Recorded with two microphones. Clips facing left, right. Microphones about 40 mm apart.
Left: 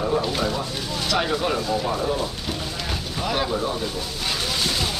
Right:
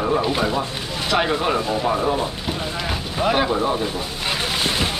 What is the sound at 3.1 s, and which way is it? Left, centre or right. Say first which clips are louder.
Speech: right 6 dB; right.